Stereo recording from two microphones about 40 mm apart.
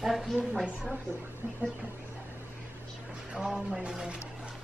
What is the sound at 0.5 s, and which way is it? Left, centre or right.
Speech, centre.